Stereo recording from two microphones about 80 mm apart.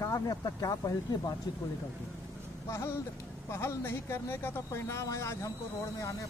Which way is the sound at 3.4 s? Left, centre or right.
Left.